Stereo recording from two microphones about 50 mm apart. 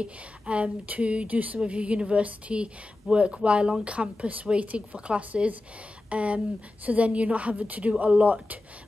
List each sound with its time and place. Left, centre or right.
0.0 s a woman's voice: right